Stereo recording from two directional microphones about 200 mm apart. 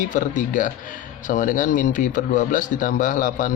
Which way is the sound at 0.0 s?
40° left (ahead or behind).